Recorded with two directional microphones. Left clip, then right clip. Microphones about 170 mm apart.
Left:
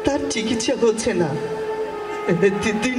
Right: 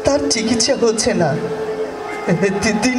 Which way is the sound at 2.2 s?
15° right (ahead or behind).